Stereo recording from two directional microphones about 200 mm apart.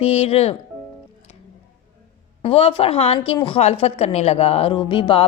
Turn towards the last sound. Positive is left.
turn(degrees=25)  # may be behind; listen again after turning